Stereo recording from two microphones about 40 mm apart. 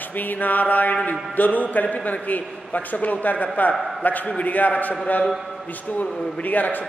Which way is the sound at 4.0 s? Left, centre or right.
Left.